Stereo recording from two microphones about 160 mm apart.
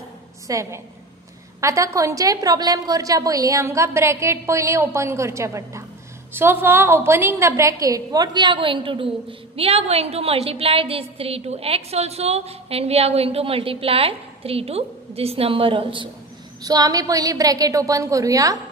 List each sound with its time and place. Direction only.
0.5 s a woman's voice: 20° right (ahead or behind)